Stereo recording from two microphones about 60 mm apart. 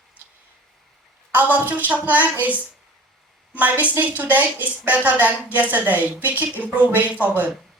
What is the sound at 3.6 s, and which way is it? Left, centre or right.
Speech, right.